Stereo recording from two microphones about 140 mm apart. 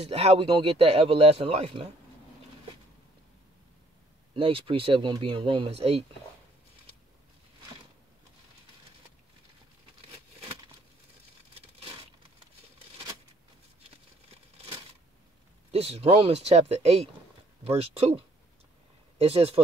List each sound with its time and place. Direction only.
0.0 s speech: 45° right (ahead or behind)
4.4 s speech: 40° right (ahead or behind)
13.8 s crumpling: 45° right (ahead or behind)
15.7 s speech: 45° right (ahead or behind)